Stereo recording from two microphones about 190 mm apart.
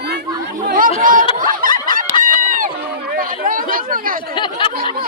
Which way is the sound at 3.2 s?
45° right (ahead or behind).